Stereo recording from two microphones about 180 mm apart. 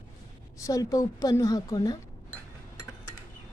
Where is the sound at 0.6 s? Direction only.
20° left (ahead or behind).